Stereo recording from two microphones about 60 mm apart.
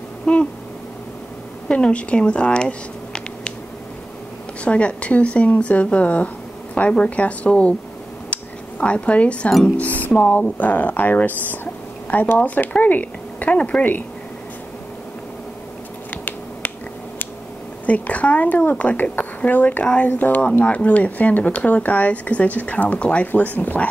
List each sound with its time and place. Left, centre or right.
0.2 s a sound: centre
1.7 s speech: centre
4.6 s speech: left
8.3 s cutlery: centre
9.8 s speech: left
17.8 s speech: left